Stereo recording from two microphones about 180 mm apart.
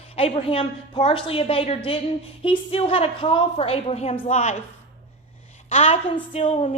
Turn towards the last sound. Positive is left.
turn(degrees=35)  # may be behind; listen again after turning